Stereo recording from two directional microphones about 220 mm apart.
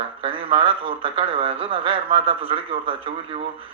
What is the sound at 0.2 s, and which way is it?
Speech, 25° right (ahead or behind).